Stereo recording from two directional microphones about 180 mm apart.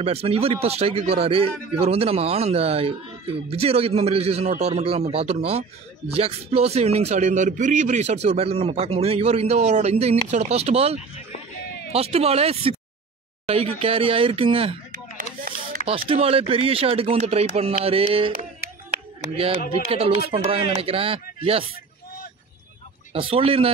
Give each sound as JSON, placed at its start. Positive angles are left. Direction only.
{"t": 0.0, "sound": "a man's voice", "side_deg": -35}
{"t": 14.9, "sound": "a sound", "side_deg": -50}
{"t": 16.1, "sound": "a man's voice", "side_deg": -30}
{"t": 19.3, "sound": "a man's voice", "side_deg": -30}
{"t": 23.1, "sound": "a man's voice", "side_deg": -30}